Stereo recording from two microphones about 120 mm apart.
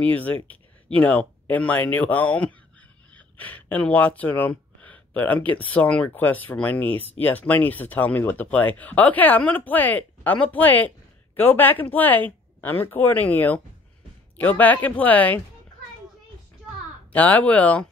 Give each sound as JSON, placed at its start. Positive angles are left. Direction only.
{"t": 0.0, "sound": "speech", "side_deg": 15}
{"t": 17.1, "sound": "speech", "side_deg": 15}